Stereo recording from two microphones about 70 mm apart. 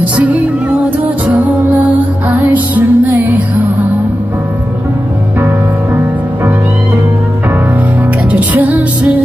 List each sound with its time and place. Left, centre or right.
0.0 s music: right
8.3 s music: right